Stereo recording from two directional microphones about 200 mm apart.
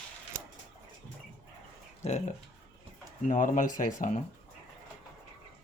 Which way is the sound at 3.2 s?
40° left (ahead or behind).